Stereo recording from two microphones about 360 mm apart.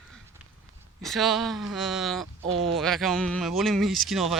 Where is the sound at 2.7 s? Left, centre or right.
Centre.